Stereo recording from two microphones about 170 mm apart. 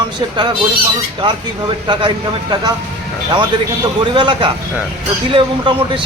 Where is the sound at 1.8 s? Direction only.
25° right (ahead or behind).